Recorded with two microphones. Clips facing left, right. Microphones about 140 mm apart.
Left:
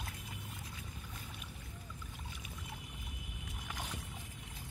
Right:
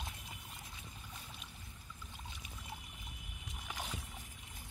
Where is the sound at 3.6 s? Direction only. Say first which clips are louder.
Right 1 dB; 10° right (ahead or behind).